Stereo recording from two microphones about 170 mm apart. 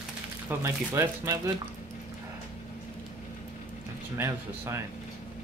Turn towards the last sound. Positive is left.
turn(degrees=-15)  # may be behind; listen again after turning